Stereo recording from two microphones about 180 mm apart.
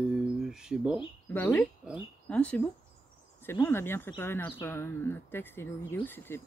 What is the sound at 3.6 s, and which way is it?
Speech, 10° left (ahead or behind).